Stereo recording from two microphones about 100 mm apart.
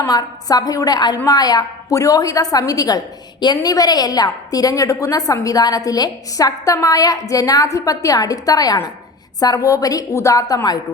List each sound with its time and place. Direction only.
0.1 s a woman's voice: 40° left (ahead or behind)